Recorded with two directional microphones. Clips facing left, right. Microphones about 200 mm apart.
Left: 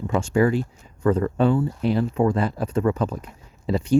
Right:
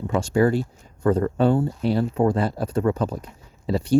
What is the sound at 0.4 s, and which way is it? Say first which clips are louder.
Speech: right 1 dB; 35° right (ahead or behind).